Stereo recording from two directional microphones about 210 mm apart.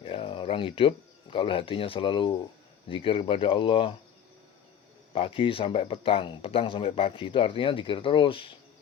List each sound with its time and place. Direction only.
0.0 s speech: 25° left (ahead or behind)
5.1 s speech: 25° left (ahead or behind)